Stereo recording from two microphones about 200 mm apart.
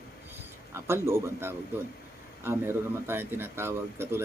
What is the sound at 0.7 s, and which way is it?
Speech, 15° right (ahead or behind).